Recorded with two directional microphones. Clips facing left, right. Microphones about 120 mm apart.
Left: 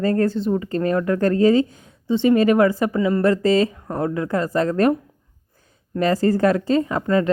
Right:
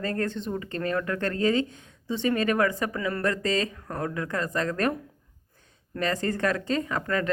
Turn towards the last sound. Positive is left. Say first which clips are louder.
# left 8 dB
turn(degrees=30)  # may be behind; listen again after turning